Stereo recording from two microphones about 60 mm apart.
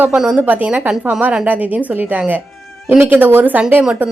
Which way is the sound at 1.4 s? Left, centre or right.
Right.